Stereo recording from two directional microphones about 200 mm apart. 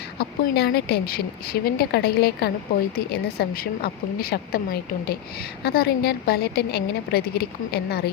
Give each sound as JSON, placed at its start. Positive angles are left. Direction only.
{"t": 0.2, "sound": "a woman's voice", "side_deg": 55}